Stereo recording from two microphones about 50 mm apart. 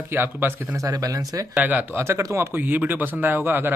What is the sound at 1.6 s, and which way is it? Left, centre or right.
Speech, right.